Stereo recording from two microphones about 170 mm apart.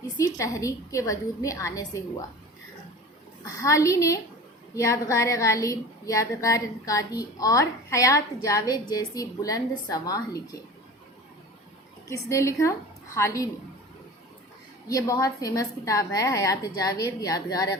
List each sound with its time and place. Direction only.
0.3 s a woman's voice: 20° left (ahead or behind)
3.4 s a woman's voice: 20° left (ahead or behind)
12.0 s a woman's voice: 15° left (ahead or behind)
14.8 s a woman's voice: 20° left (ahead or behind)